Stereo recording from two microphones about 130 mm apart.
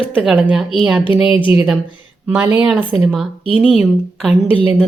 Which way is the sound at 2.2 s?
15° right (ahead or behind).